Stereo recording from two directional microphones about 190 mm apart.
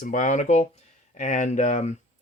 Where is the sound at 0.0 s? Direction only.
40° left (ahead or behind).